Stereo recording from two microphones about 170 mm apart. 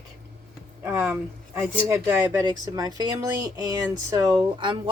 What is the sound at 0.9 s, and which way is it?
Speech, 10° right (ahead or behind).